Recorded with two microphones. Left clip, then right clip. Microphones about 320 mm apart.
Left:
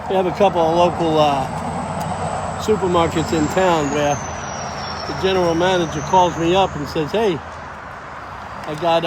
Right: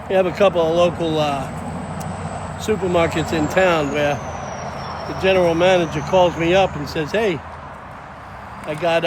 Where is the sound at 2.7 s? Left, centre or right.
Centre.